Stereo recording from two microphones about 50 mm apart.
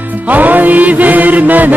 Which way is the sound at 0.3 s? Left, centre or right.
Right.